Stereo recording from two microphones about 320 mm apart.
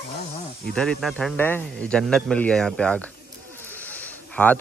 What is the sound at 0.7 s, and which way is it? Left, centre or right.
Speech, centre.